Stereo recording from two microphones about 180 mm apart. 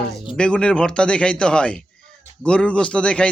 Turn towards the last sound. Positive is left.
turn(degrees=5)  # may be behind; listen again after turning